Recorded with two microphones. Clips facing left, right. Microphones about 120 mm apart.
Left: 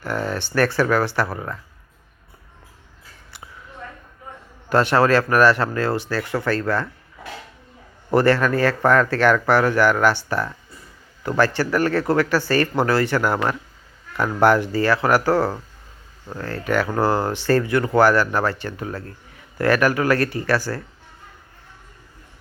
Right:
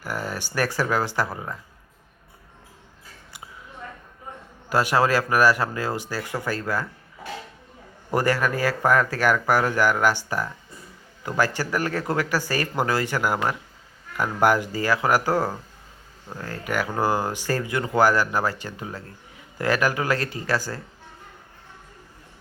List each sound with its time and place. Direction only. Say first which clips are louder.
0.0 s speech: left 5 dB; 10° right (ahead or behind)
4.7 s speech: left 4 dB; 10° right (ahead or behind)
8.1 s speech: left 6 dB; 15° right (ahead or behind)